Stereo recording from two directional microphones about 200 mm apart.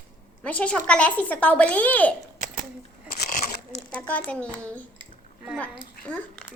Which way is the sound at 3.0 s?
40° left (ahead or behind).